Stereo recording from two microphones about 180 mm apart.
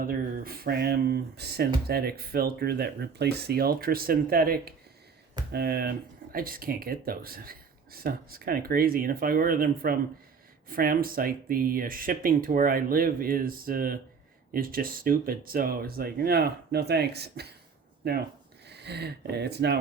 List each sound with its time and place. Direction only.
0.0 s speech: 55° right (ahead or behind)